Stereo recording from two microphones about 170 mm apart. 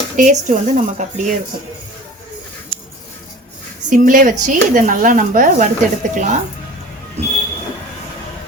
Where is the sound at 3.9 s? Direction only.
55° right (ahead or behind).